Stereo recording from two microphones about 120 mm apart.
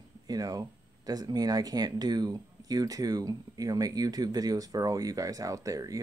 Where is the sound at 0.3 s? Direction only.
30° right (ahead or behind).